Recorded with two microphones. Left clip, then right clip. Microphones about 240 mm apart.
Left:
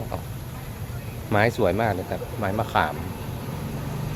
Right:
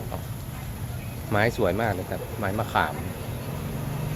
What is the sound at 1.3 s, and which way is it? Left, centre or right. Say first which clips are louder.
Speech: left 2 dB; centre.